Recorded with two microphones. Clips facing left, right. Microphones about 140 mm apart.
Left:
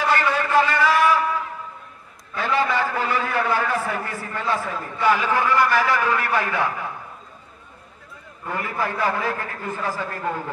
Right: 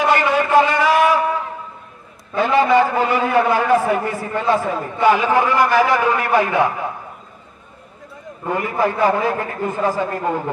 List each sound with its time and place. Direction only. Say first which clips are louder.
0.0 s a sound: right 5 dB; 20° right (ahead or behind)
2.3 s a man's voice: right 8 dB; 20° right (ahead or behind)
8.5 s a man's voice: right 7 dB; 20° right (ahead or behind)